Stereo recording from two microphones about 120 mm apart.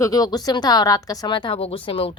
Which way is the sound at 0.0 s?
30° left (ahead or behind).